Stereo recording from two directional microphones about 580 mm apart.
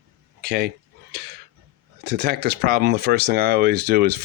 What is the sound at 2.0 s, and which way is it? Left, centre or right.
Speech, centre.